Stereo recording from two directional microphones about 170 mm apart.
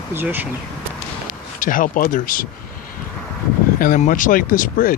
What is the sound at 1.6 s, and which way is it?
Speech, 55° left (ahead or behind).